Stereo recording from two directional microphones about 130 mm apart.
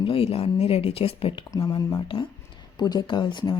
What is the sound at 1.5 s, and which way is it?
A man's voice, 25° left (ahead or behind).